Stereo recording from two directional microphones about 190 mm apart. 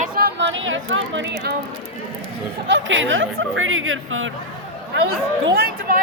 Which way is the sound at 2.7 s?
80° right.